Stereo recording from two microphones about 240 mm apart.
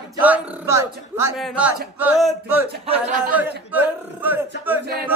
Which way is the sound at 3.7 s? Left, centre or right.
Centre.